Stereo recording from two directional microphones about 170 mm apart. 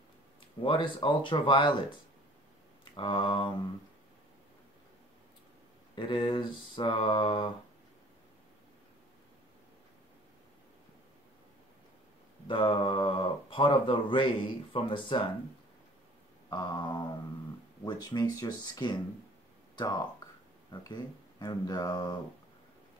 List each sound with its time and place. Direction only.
0.7 s speech: 30° left (ahead or behind)
2.8 s mantra: 30° left (ahead or behind)
5.9 s speech: 30° left (ahead or behind)
12.4 s speech: 30° left (ahead or behind)
16.4 s speech: 25° left (ahead or behind)